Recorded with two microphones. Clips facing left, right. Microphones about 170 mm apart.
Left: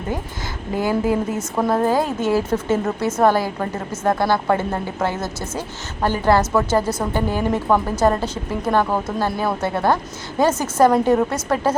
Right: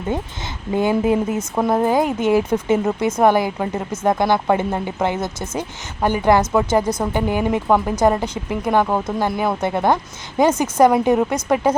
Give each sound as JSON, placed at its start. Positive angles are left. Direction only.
{"t": 0.7, "sound": "a woman's voice", "side_deg": -20}